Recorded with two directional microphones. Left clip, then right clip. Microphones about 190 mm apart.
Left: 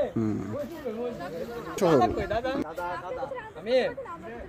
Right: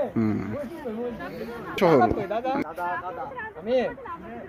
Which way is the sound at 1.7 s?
Centre (ahead or behind).